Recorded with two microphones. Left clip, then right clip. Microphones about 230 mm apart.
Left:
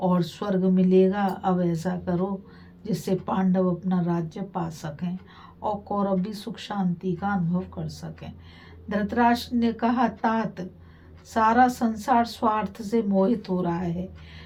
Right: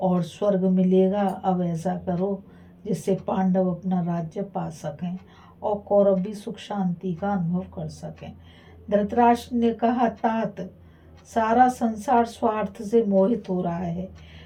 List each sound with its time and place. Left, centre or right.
0.0 s a woman's voice: centre